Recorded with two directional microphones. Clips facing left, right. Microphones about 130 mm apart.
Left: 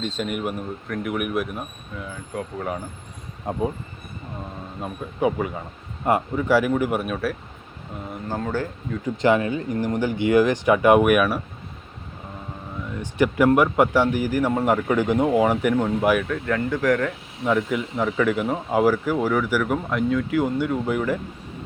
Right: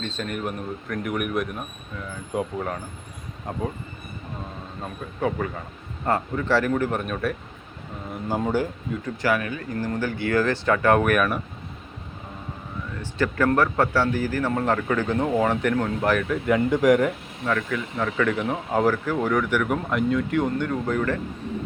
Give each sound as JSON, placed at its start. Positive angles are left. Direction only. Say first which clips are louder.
{"t": 0.0, "sound": "speech", "louder": "left 3 dB", "side_deg": 10}
{"t": 3.5, "sound": "speech", "louder": "left 4 dB", "side_deg": 20}
{"t": 4.8, "sound": "speech", "louder": "left 4 dB", "side_deg": 15}
{"t": 8.3, "sound": "speech", "louder": "right 3 dB", "side_deg": -15}
{"t": 9.0, "sound": "speech", "louder": "left 5 dB", "side_deg": 25}
{"t": 13.0, "sound": "speech", "louder": "left 4 dB", "side_deg": 15}
{"t": 16.3, "sound": "speech", "louder": "right 3 dB", "side_deg": -15}
{"t": 17.4, "sound": "speech", "louder": "left 4 dB", "side_deg": 20}